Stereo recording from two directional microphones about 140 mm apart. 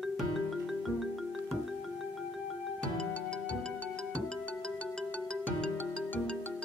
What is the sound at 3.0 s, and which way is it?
Music, 5° left (ahead or behind).